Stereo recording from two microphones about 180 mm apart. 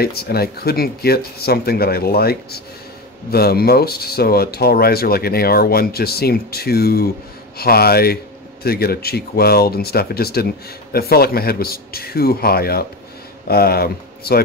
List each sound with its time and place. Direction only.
0.0 s speech: 60° left (ahead or behind)